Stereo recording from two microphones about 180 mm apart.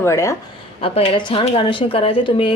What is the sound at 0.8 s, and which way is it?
Speech, 30° left (ahead or behind).